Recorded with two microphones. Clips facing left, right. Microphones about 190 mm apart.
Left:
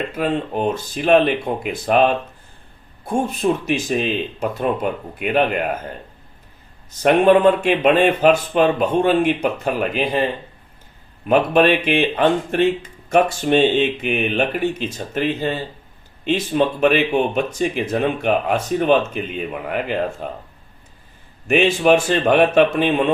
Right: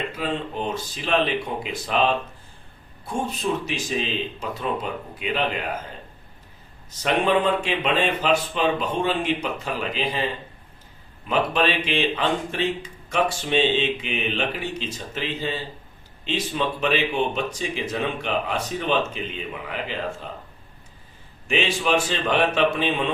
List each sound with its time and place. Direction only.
0.2 s speech: 55° left (ahead or behind)
7.0 s speech: 55° left (ahead or behind)
11.3 s speech: 55° left (ahead or behind)
21.4 s speech: 55° left (ahead or behind)